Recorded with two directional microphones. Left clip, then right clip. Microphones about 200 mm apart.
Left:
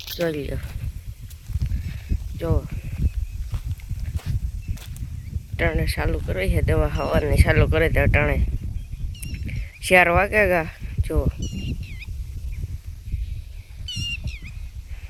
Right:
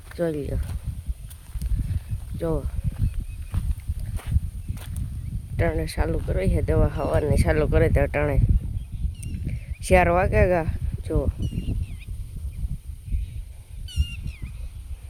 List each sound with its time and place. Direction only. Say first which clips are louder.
0.2 s speech: left 1 dB; 5° left (ahead or behind)
2.4 s speech: even; centre (ahead or behind)
3.5 s walk: right 3 dB; 5° left (ahead or behind)
5.5 s speech: left 2 dB; centre (ahead or behind)
9.5 s speech: left 3 dB; centre (ahead or behind)
11.4 s a sound: left 2 dB; 45° right (ahead or behind)
13.9 s a sound: left 9 dB; 40° right (ahead or behind)